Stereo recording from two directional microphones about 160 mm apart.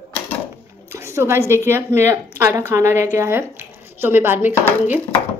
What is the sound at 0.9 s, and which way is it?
A woman's voice, 15° right (ahead or behind).